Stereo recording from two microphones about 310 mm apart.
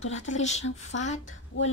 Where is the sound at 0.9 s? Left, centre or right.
Left.